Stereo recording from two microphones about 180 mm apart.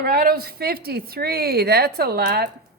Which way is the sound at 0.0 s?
55° right (ahead or behind).